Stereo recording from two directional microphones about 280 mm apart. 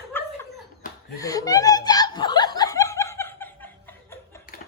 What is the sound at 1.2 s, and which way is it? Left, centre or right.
Laughter, centre.